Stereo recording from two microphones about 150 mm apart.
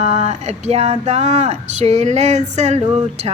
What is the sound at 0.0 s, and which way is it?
A woman's voice, 50° right (ahead or behind).